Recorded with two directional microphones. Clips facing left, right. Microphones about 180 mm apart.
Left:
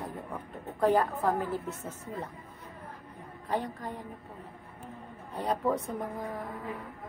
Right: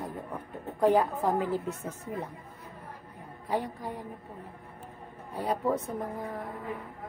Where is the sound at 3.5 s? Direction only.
10° right (ahead or behind).